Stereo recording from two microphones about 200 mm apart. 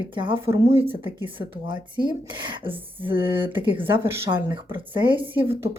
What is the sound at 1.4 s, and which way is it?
Speech, 25° right (ahead or behind).